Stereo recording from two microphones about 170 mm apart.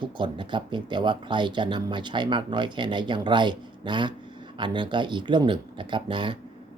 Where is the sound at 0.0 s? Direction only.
30° right (ahead or behind).